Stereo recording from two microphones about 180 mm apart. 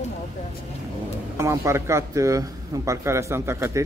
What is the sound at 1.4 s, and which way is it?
A man's voice, 15° right (ahead or behind).